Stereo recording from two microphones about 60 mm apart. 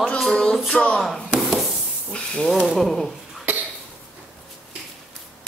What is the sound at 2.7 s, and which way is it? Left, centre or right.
Speech, centre.